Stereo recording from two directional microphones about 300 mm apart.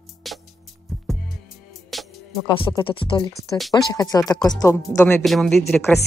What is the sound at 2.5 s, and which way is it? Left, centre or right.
Speech, centre.